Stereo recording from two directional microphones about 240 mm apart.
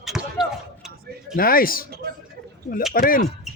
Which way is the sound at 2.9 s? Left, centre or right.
Left.